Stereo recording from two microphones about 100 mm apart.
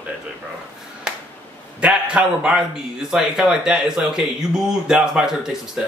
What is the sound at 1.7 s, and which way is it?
A man's voice, 10° right (ahead or behind).